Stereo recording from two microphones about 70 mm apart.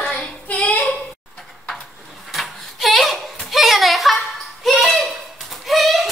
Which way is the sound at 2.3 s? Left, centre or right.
Centre.